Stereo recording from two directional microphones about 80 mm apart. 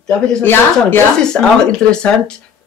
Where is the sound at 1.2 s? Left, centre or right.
Centre.